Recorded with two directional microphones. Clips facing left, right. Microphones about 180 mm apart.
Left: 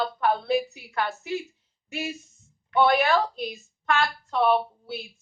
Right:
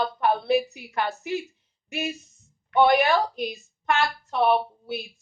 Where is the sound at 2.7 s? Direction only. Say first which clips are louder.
Right 2 dB; 15° right (ahead or behind).